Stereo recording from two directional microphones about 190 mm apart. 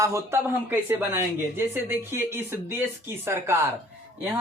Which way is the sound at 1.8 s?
10° right (ahead or behind).